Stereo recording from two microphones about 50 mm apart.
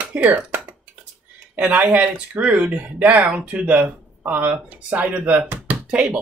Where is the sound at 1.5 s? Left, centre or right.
Right.